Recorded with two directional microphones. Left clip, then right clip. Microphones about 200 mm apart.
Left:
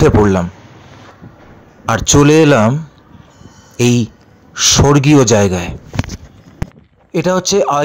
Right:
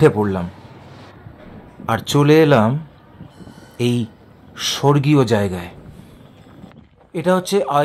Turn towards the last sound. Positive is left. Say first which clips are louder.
# left 4 dB
turn(degrees=25)  # may be behind; listen again after turning